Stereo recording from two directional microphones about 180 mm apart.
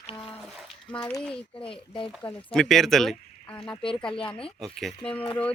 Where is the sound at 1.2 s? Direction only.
5° left (ahead or behind).